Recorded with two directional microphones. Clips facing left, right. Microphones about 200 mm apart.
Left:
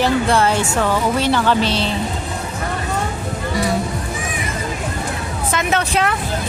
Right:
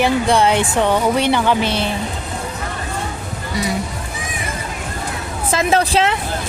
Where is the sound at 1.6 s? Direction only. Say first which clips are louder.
Even; 55° right (ahead or behind).